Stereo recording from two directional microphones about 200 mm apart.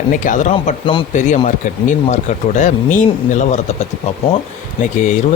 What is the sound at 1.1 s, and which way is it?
Speech, 40° left (ahead or behind).